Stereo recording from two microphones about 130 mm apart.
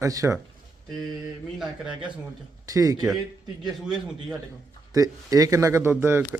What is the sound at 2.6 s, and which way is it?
Speech, 25° right (ahead or behind).